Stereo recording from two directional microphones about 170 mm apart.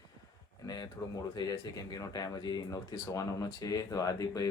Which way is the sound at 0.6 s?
20° left (ahead or behind).